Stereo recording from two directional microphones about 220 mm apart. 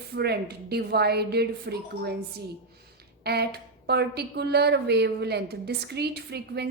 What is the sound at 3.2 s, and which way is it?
A woman's voice, 45° right (ahead or behind).